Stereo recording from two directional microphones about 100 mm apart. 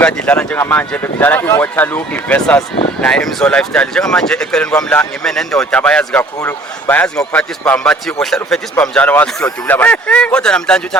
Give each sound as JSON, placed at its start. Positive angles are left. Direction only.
{"t": 0.0, "sound": "speech", "side_deg": 15}
{"t": 6.4, "sound": "speech", "side_deg": 20}
{"t": 7.2, "sound": "speech", "side_deg": 5}
{"t": 8.8, "sound": "speech", "side_deg": 15}